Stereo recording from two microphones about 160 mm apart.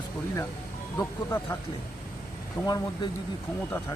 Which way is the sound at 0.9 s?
20° left (ahead or behind).